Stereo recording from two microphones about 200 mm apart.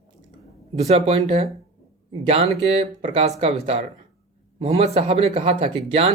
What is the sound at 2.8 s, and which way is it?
Speech, 30° right (ahead or behind).